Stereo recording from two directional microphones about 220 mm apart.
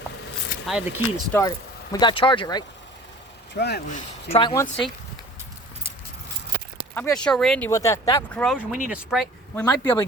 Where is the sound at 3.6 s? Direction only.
50° left (ahead or behind).